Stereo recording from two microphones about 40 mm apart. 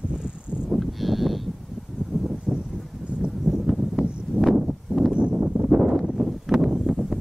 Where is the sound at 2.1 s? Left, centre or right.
Centre.